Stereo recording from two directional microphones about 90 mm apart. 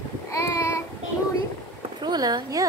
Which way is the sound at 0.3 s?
30° left (ahead or behind).